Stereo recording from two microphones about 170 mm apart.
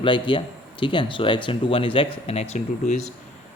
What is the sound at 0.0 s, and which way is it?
A man's voice, 30° left (ahead or behind).